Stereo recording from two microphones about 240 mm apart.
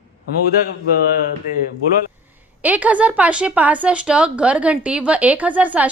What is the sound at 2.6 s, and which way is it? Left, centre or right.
Speech, centre.